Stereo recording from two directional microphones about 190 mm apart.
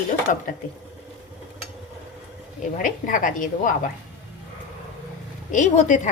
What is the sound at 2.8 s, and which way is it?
Speech, 45° left (ahead or behind).